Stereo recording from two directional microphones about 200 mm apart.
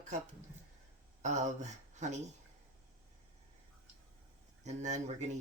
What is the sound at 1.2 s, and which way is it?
Speech, 35° right (ahead or behind).